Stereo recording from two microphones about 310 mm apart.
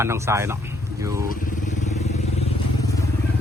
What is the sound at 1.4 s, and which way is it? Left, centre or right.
Vehicle, left.